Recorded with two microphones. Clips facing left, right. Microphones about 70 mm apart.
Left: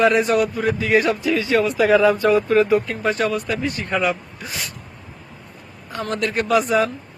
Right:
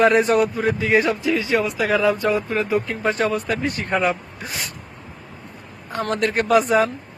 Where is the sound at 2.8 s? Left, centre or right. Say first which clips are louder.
Even; right.